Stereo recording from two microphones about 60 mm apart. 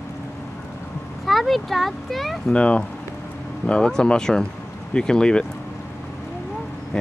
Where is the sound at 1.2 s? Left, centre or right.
Centre.